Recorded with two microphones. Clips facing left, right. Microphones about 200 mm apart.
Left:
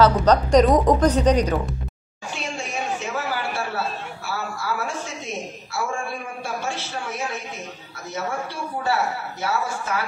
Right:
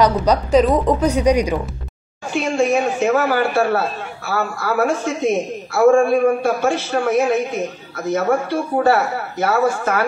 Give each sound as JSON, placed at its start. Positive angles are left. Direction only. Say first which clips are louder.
{"t": 0.0, "sound": "a woman's voice", "louder": "right 1 dB", "side_deg": -10}
{"t": 2.4, "sound": "a sound", "louder": "right 12 dB", "side_deg": -55}
{"t": 4.3, "sound": "a man's voice", "louder": "right 7 dB", "side_deg": -50}